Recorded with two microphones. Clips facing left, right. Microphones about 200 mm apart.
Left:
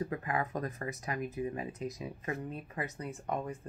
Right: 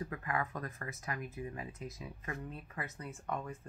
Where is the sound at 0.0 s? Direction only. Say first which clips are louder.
Left 4 dB; 20° left (ahead or behind).